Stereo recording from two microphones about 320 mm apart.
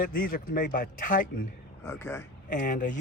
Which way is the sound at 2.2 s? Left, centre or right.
Left.